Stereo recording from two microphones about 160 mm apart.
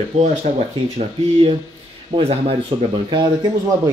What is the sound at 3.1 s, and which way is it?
Speech, 25° right (ahead or behind).